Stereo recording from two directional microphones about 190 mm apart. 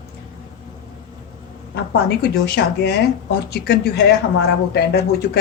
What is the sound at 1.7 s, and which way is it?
Speech, 60° left (ahead or behind).